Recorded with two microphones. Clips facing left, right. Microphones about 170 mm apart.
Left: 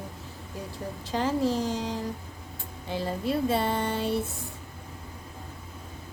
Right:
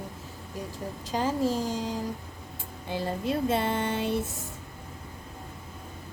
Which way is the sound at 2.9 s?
20° right (ahead or behind).